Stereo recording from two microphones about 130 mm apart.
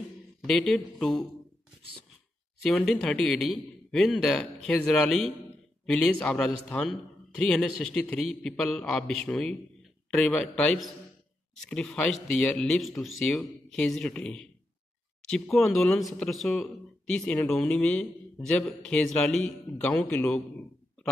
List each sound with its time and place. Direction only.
0.4 s speech: 5° left (ahead or behind)
2.6 s speech: 5° left (ahead or behind)